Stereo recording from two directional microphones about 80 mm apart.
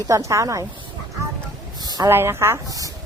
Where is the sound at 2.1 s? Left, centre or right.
Right.